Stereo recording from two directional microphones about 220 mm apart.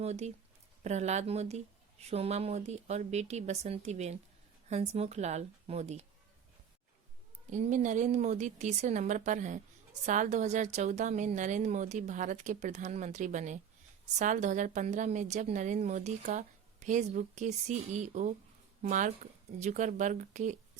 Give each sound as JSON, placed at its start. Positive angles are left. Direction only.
{"t": 0.0, "sound": "a woman's voice", "side_deg": -30}
{"t": 7.5, "sound": "a woman's voice", "side_deg": -35}